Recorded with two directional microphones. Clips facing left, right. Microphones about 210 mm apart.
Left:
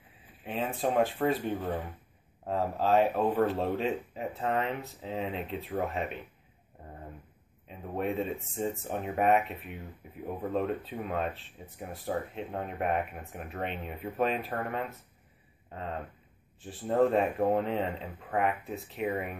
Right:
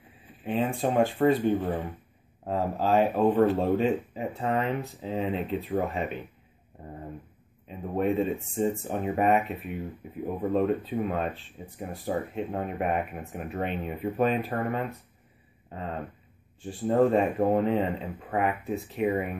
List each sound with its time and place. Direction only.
0.4 s speech: centre (ahead or behind)
7.6 s speech: centre (ahead or behind)